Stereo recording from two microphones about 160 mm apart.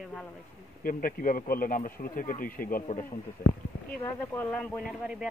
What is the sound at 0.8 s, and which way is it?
Speech, 60° left (ahead or behind).